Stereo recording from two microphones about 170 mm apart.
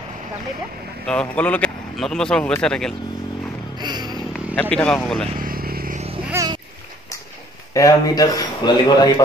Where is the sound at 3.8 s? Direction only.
25° right (ahead or behind).